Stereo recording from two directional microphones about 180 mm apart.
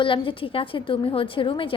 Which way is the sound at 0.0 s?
30° left (ahead or behind).